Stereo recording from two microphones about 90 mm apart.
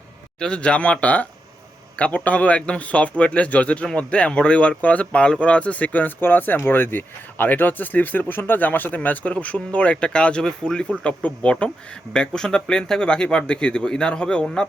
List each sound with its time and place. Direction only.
0.3 s speech: 10° left (ahead or behind)